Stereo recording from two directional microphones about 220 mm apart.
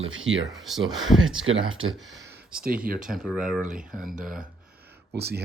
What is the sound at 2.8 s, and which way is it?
Speech, 40° right (ahead or behind).